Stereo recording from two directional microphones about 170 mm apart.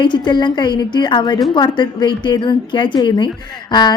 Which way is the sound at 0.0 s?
25° left (ahead or behind).